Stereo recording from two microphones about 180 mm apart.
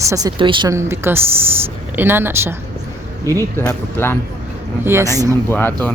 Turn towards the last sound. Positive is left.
turn(degrees=10)  # may be behind; listen again after turning